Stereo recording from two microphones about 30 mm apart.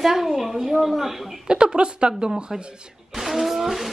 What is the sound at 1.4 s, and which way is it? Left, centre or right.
Speech, right.